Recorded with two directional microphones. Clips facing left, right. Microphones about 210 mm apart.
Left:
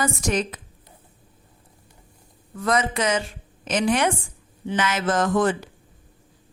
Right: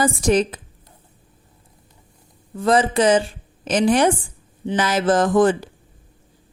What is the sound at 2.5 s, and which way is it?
Speech, 30° right (ahead or behind).